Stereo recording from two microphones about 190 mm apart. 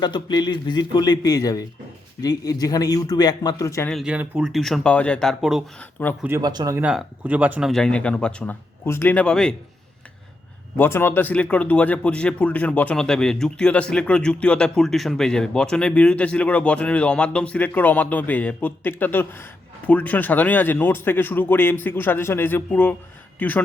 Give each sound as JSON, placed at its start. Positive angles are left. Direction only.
{"t": 0.0, "sound": "a man's voice", "side_deg": 20}
{"t": 3.8, "sound": "speech", "side_deg": 0}
{"t": 6.2, "sound": "speech", "side_deg": -20}
{"t": 6.8, "sound": "speech", "side_deg": -5}
{"t": 10.8, "sound": "speech", "side_deg": 10}